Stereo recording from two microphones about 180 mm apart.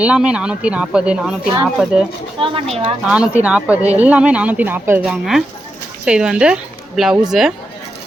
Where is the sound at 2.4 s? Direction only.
30° right (ahead or behind).